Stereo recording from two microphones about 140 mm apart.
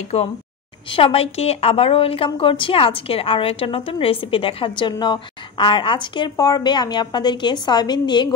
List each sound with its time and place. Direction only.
0.1 s a woman's voice: 50° left (ahead or behind); by 8.4 s 30° left (ahead or behind)